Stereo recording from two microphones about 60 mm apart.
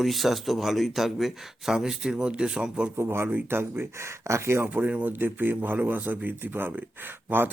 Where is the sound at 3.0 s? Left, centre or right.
Right.